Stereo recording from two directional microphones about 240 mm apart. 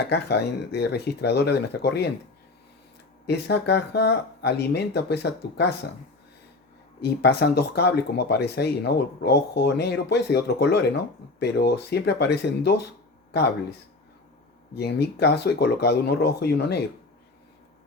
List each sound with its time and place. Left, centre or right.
0.1 s speech: left
3.2 s speech: left
7.0 s speech: left
14.8 s speech: left